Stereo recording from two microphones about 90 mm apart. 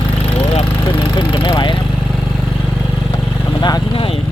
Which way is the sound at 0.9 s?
70° left (ahead or behind).